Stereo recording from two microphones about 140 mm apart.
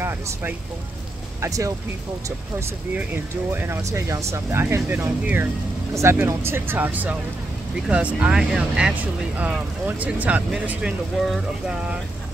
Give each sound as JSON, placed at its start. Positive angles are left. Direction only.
{"t": 0.0, "sound": "speech", "side_deg": -15}